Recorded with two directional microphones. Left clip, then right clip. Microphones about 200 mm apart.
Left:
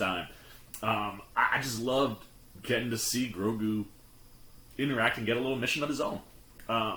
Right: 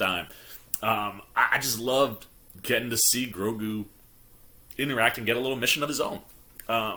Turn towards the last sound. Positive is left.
turn(degrees=-10)  # may be behind; listen again after turning